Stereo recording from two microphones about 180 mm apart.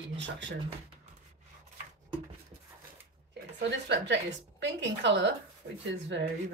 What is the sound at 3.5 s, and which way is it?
A woman's voice, 75° right (ahead or behind).